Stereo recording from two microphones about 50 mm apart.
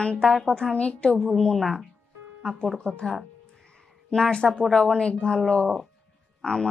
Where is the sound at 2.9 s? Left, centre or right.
Centre.